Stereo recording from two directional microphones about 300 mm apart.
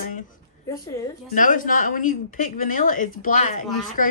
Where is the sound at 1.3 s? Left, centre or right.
Left.